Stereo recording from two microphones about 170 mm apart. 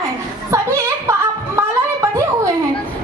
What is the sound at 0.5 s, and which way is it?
Music, 15° right (ahead or behind).